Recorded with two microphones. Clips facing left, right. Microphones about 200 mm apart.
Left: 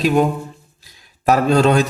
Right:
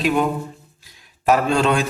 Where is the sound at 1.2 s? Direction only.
40° left (ahead or behind).